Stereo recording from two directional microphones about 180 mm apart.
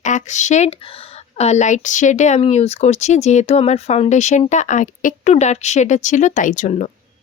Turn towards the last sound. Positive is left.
turn(degrees=40)  # may be behind; listen again after turning